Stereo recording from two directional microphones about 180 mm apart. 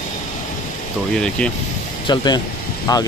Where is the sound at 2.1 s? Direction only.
25° left (ahead or behind).